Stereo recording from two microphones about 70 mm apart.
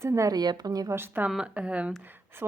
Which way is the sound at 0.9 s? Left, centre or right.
Right.